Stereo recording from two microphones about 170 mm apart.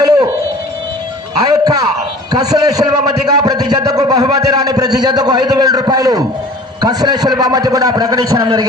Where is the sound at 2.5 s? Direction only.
20° right (ahead or behind).